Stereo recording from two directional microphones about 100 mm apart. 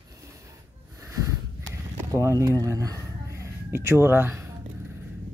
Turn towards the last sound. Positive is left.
turn(degrees=-25)  # may be behind; listen again after turning